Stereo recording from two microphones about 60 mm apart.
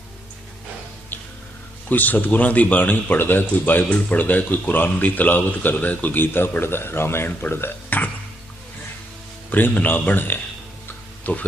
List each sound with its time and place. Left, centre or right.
1.9 s speech: left
9.5 s speech: left